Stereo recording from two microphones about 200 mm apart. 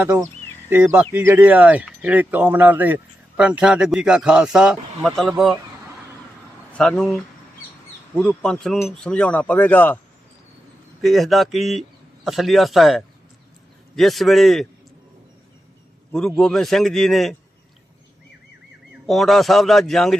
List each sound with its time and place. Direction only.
0.0 s speech: 10° right (ahead or behind)
6.7 s speech: 5° left (ahead or behind)
11.0 s speech: centre (ahead or behind)
16.1 s speech: 5° left (ahead or behind)
19.0 s speech: centre (ahead or behind)